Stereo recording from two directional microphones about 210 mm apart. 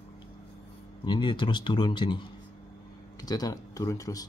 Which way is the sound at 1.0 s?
20° left (ahead or behind).